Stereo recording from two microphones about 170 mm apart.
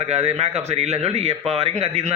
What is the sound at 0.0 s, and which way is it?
A man's voice, 40° right (ahead or behind).